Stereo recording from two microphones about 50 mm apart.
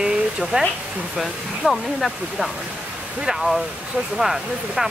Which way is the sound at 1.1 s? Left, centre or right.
Centre.